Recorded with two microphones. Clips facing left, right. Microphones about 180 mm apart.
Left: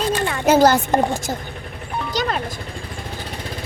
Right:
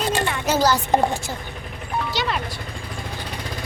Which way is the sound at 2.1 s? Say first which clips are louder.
Left 3 dB; 45° left (ahead or behind).